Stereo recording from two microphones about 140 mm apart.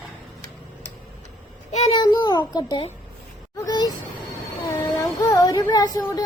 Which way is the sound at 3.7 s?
30° left (ahead or behind).